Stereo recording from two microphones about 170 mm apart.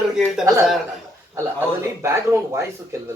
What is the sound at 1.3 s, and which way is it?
A man's voice, 15° right (ahead or behind).